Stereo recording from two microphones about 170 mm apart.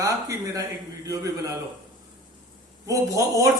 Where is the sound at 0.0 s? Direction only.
20° right (ahead or behind).